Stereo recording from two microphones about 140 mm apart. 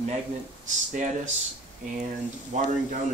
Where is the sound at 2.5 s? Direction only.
65° right (ahead or behind).